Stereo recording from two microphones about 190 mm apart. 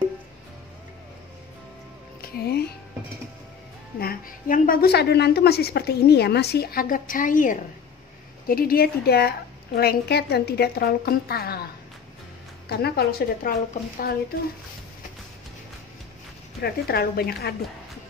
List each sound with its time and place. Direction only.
2.2 s speech: 55° left (ahead or behind)
4.0 s a woman's voice: 50° left (ahead or behind)
16.6 s a woman's voice: 55° left (ahead or behind)